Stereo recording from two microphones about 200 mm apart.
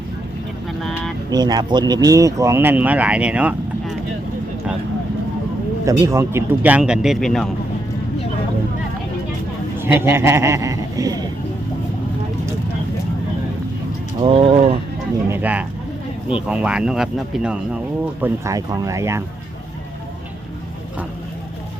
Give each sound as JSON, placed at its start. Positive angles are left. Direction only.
{"t": 0.8, "sound": "speech", "side_deg": 0}
{"t": 1.3, "sound": "speech", "side_deg": -20}
{"t": 5.8, "sound": "speech", "side_deg": -15}
{"t": 9.7, "sound": "a man's voice", "side_deg": -10}
{"t": 14.3, "sound": "speech", "side_deg": -25}
{"t": 15.3, "sound": "speech", "side_deg": -10}
{"t": 18.2, "sound": "speech", "side_deg": -15}